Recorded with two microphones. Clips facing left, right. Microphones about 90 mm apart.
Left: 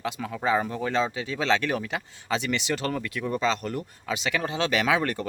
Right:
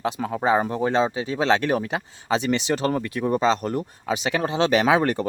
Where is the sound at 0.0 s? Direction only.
35° right (ahead or behind).